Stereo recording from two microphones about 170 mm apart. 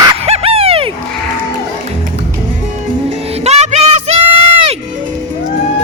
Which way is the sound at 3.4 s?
40° right (ahead or behind).